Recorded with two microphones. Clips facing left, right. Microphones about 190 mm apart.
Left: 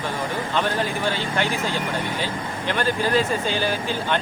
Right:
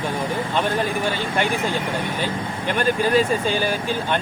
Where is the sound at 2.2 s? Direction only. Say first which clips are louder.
Right 2 dB; 15° right (ahead or behind).